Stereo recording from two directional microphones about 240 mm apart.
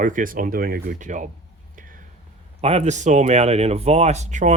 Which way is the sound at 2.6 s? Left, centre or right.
Right.